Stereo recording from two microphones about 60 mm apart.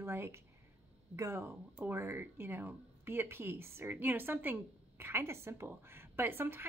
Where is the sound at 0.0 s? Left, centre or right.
Right.